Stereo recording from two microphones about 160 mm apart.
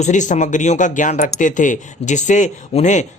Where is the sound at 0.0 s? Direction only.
50° left (ahead or behind).